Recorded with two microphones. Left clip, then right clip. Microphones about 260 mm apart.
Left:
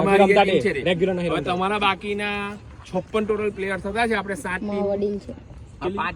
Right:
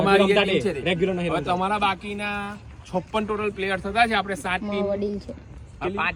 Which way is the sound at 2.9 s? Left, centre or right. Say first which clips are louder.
Left 2 dB; centre.